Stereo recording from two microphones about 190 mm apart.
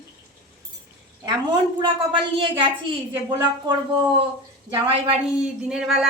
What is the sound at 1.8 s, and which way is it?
Speech, 25° right (ahead or behind).